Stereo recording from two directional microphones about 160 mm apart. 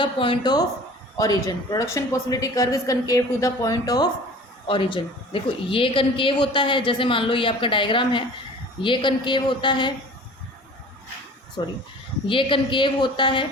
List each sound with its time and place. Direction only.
0.0 s a woman's voice: 30° left (ahead or behind)
11.6 s a woman's voice: 25° left (ahead or behind)